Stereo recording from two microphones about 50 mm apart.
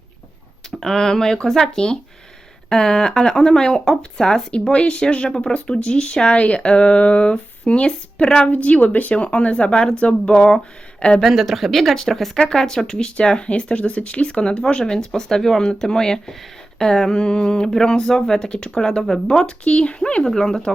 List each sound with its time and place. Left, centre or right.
0.8 s speech: centre
8.5 s speech: left
11.3 s speech: centre